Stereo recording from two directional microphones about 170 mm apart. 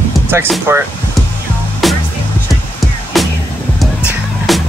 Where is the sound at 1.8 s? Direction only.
Centre (ahead or behind).